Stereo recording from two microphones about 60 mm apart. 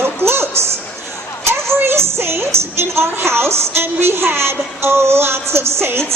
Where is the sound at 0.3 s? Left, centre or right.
Right.